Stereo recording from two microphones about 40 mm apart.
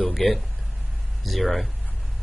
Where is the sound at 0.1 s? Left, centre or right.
Centre.